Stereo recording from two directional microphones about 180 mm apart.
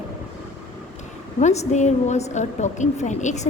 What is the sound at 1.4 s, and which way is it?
A woman's voice, 40° left (ahead or behind).